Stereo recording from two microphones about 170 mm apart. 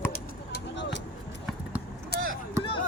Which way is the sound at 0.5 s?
90° left.